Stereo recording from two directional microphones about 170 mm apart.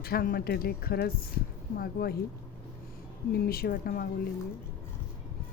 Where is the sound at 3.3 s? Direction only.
65° left (ahead or behind).